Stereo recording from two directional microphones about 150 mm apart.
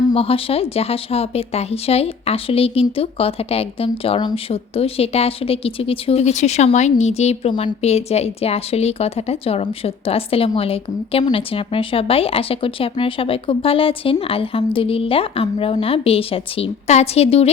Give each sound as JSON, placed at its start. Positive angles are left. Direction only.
{"t": 0.1, "sound": "speech", "side_deg": 40}